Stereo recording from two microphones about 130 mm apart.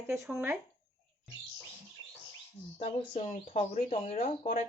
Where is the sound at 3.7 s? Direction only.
55° left (ahead or behind).